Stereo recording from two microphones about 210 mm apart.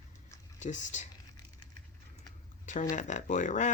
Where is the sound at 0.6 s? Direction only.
35° left (ahead or behind).